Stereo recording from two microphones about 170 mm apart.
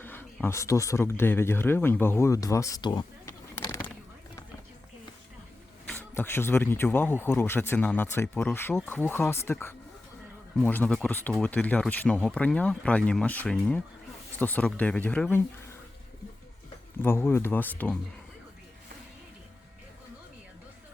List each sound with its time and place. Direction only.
0.0 s a sound: 10° left (ahead or behind)
0.4 s speech: 15° left (ahead or behind)
5.9 s speech: 15° left (ahead or behind)
17.0 s speech: 15° left (ahead or behind)